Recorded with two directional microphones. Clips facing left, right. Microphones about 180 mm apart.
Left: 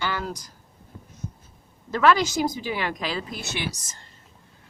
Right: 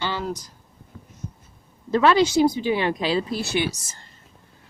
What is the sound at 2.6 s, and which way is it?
Speech, 25° right (ahead or behind).